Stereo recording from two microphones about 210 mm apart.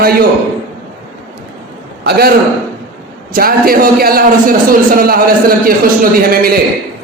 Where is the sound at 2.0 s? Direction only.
45° right (ahead or behind).